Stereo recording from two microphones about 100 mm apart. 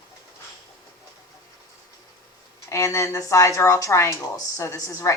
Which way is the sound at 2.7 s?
30° left (ahead or behind).